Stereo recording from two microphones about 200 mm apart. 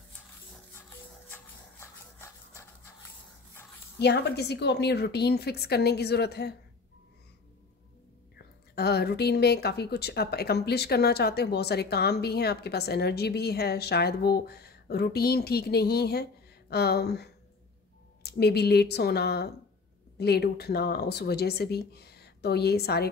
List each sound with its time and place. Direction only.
1.3 s dog: 10° left (ahead or behind)
4.0 s a woman's voice: 55° left (ahead or behind)
8.7 s a woman's voice: 55° left (ahead or behind)